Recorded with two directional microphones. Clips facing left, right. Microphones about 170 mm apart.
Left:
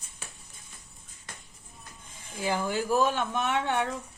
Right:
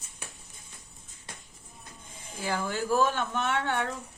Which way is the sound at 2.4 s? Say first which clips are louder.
Left 2 dB; 15° left (ahead or behind).